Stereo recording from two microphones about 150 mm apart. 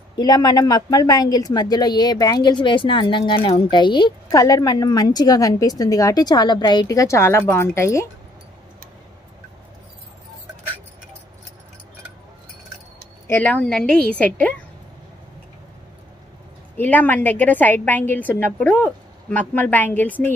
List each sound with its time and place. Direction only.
0.2 s speech: 25° left (ahead or behind)
13.3 s a woman's voice: 10° left (ahead or behind)
16.7 s a woman's voice: 10° left (ahead or behind)